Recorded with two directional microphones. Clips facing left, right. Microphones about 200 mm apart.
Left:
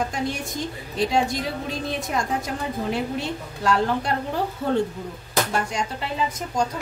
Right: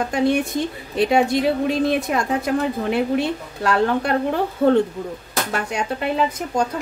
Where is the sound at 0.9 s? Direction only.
60° right (ahead or behind).